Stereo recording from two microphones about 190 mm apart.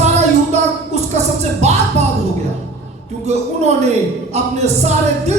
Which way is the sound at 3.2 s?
35° right (ahead or behind).